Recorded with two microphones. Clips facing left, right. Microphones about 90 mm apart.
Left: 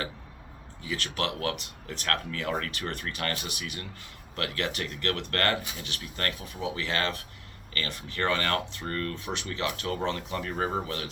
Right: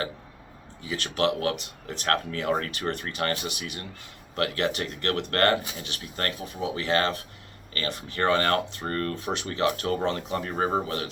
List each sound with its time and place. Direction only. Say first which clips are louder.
0.8 s speech: right 5 dB; 25° right (ahead or behind)